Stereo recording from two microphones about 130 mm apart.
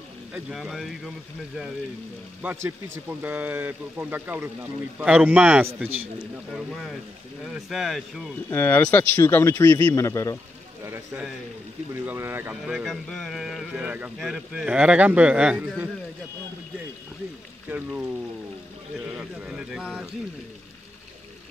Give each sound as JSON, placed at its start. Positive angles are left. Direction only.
{"t": 0.5, "sound": "speech", "side_deg": 0}
{"t": 2.4, "sound": "speech", "side_deg": -15}
{"t": 6.5, "sound": "speech", "side_deg": 0}
{"t": 8.5, "sound": "a man's voice", "side_deg": 15}
{"t": 11.9, "sound": "speech", "side_deg": -20}
{"t": 12.6, "sound": "speech", "side_deg": -5}
{"t": 17.6, "sound": "speech", "side_deg": -15}
{"t": 19.1, "sound": "speech", "side_deg": -5}